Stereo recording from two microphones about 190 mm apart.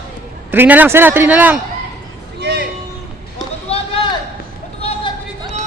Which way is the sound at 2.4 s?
60° right (ahead or behind).